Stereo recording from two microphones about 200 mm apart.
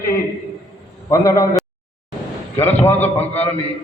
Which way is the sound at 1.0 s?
15° left (ahead or behind).